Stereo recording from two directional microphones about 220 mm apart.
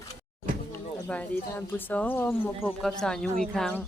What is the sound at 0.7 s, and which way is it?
A woman's voice, 10° left (ahead or behind).